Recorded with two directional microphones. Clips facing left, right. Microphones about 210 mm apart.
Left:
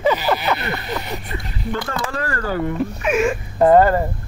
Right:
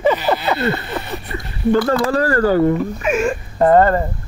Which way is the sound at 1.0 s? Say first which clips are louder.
Right 1 dB; 20° left (ahead or behind).